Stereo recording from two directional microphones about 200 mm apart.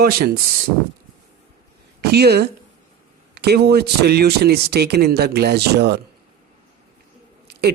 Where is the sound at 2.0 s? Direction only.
55° right (ahead or behind).